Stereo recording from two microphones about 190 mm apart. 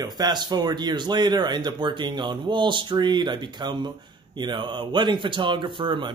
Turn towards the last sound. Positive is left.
turn(degrees=-25)  # may be behind; listen again after turning